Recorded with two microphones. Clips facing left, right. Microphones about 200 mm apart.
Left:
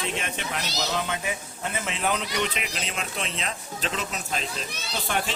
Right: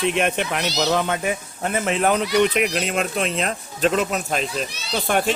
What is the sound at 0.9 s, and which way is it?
Speech, 50° right (ahead or behind).